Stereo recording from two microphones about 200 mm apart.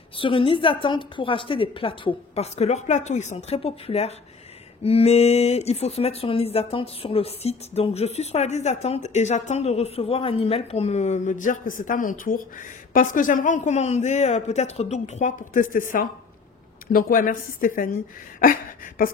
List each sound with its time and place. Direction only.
0.2 s a woman's voice: 25° left (ahead or behind); by 15.8 s 45° left (ahead or behind)
16.8 s a woman's voice: 45° left (ahead or behind)